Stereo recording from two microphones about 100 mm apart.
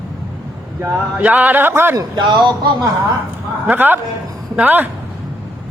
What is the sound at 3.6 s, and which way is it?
A man's voice, 20° right (ahead or behind).